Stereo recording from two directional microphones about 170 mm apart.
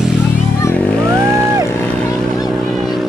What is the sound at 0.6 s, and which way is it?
Vehicle, 10° left (ahead or behind).